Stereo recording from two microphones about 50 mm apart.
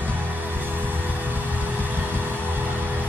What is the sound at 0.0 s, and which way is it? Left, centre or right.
Music, right.